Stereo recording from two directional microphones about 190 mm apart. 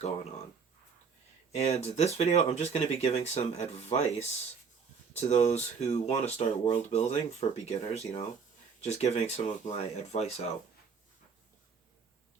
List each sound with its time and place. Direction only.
1.5 s speech: 35° left (ahead or behind)